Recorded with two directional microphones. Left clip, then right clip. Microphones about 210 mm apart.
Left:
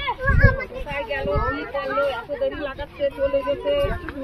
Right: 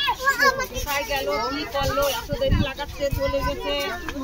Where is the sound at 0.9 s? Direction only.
60° right (ahead or behind).